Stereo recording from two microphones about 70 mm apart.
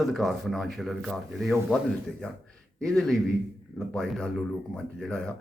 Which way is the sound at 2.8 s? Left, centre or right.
Centre.